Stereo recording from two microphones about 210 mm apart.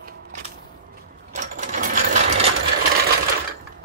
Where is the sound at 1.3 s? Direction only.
40° right (ahead or behind).